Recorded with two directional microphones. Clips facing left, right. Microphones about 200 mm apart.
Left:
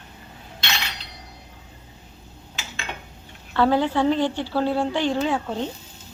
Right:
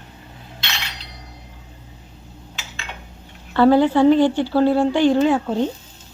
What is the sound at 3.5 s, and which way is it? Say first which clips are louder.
A woman's voice: right 6 dB; 5° right (ahead or behind).